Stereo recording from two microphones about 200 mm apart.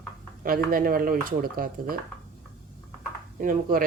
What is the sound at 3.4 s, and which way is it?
Speech, 45° right (ahead or behind).